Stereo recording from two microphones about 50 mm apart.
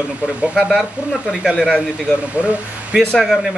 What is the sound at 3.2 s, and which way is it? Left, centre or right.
Speech, centre.